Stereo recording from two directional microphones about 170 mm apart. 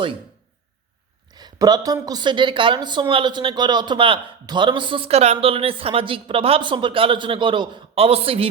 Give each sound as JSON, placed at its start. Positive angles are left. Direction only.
{"t": 1.3, "sound": "a woman's voice", "side_deg": -25}